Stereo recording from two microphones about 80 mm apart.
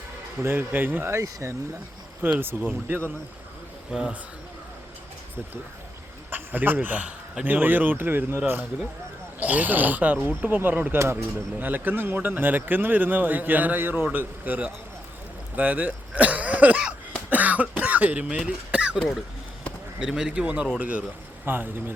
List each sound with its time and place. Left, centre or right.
0.4 s speech: right
2.2 s speech: right
6.3 s speech: right
9.4 s speech: centre
10.9 s speech: right
11.6 s speech: right
17.2 s cough: centre
20.0 s speech: centre; by 21.9 s right